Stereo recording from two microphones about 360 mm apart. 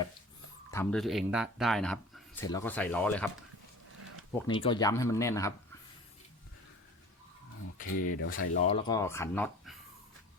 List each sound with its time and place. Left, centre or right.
0.7 s speech: centre
4.4 s speech: centre
7.8 s speech: left
8.9 s speech: centre